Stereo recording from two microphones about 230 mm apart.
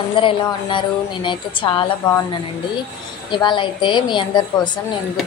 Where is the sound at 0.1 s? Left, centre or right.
Left.